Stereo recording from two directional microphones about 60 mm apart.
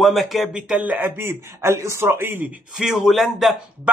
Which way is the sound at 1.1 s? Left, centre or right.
Right.